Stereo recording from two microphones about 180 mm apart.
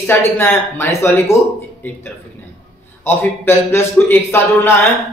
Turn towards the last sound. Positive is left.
turn(degrees=15)  # may be behind; listen again after turning